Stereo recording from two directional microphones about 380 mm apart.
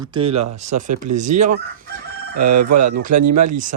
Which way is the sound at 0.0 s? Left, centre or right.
Centre.